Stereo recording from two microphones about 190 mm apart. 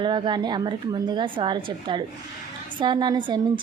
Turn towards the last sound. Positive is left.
turn(degrees=-20)  # may be behind; listen again after turning